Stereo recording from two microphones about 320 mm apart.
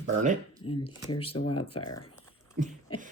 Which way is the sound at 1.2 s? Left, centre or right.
Left.